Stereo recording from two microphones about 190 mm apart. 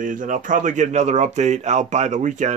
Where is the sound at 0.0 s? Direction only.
45° right (ahead or behind).